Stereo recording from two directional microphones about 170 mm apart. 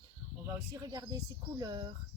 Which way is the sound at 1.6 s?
25° right (ahead or behind).